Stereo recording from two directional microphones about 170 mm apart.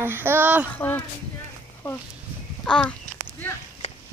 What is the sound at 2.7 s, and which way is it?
Speech, 5° left (ahead or behind).